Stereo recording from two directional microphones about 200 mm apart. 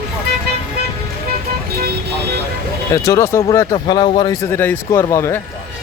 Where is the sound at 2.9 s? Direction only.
15° left (ahead or behind).